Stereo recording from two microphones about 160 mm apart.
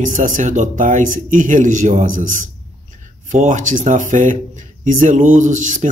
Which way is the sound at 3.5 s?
50° right (ahead or behind).